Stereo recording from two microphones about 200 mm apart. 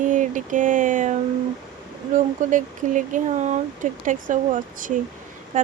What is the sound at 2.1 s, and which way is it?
Speech, 40° right (ahead or behind).